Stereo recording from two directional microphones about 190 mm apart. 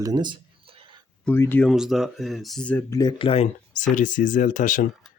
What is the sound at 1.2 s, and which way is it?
Speech, 10° left (ahead or behind).